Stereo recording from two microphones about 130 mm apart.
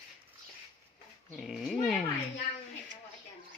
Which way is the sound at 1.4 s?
Centre (ahead or behind).